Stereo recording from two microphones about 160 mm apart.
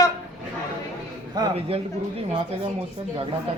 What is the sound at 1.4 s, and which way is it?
Speech, 25° right (ahead or behind).